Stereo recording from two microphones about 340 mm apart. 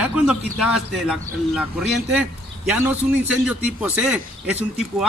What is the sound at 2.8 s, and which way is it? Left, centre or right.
Speech, centre.